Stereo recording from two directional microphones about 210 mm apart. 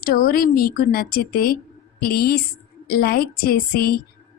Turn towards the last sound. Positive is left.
turn(degrees=45)  # may be behind; listen again after turning